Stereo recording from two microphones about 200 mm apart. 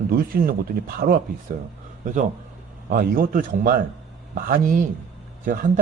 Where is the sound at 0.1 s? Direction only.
50° right (ahead or behind).